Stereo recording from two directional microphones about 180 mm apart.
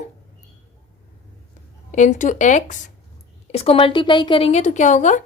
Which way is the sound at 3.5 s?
30° left (ahead or behind).